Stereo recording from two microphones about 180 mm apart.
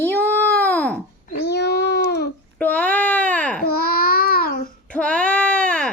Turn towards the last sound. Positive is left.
turn(degrees=5)  # may be behind; listen again after turning